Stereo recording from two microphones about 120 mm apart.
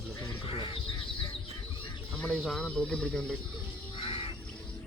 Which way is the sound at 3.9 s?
50° left (ahead or behind).